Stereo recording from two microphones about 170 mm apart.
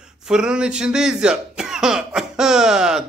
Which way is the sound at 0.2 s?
5° right (ahead or behind).